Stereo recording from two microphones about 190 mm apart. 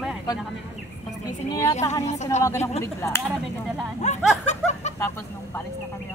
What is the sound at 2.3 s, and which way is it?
Speech, 35° left (ahead or behind).